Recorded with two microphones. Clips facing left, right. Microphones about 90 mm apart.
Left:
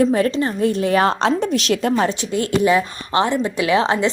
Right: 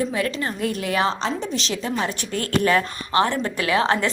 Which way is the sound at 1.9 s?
35° left (ahead or behind).